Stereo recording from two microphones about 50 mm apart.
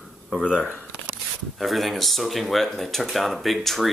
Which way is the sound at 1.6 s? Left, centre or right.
Centre.